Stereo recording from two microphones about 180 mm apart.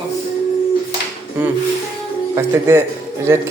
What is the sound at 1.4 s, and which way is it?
Speech, 10° right (ahead or behind).